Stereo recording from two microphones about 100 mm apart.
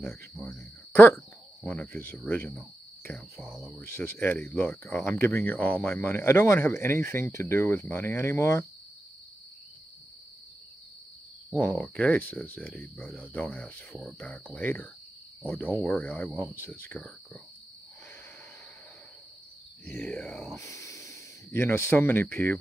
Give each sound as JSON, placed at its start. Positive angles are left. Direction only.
{"t": 0.0, "sound": "speech", "side_deg": 10}
{"t": 3.3, "sound": "speech", "side_deg": -5}
{"t": 3.8, "sound": "speech", "side_deg": 25}
{"t": 11.5, "sound": "speech", "side_deg": 15}
{"t": 20.0, "sound": "speech", "side_deg": 10}
{"t": 20.4, "sound": "speech", "side_deg": 30}